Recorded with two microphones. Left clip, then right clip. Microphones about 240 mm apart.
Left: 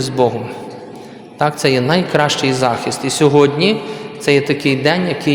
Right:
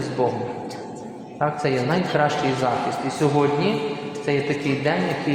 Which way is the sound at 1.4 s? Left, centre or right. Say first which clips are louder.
Left 8 dB; left.